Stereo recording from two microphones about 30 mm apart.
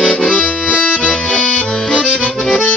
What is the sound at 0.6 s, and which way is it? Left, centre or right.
Accordion, left.